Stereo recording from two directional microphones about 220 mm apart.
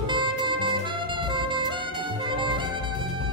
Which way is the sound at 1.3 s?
20° right (ahead or behind).